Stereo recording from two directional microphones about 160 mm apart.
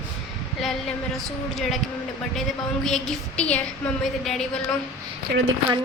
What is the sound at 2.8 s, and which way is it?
A woman's voice, centre (ahead or behind).